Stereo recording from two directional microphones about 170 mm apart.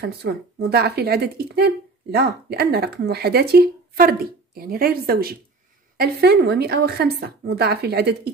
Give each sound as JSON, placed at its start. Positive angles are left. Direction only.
{"t": 0.0, "sound": "speech", "side_deg": -70}